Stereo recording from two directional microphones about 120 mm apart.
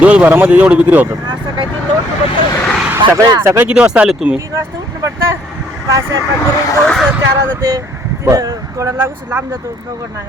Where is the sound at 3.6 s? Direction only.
10° right (ahead or behind).